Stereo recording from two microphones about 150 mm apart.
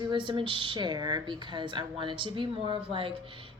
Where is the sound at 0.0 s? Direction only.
30° right (ahead or behind).